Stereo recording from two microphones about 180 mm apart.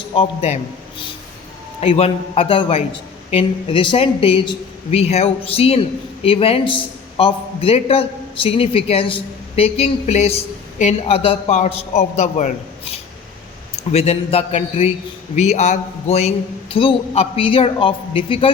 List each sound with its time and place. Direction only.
0.1 s a man's voice: 35° left (ahead or behind)